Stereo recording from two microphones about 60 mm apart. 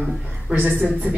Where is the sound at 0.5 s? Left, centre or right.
Right.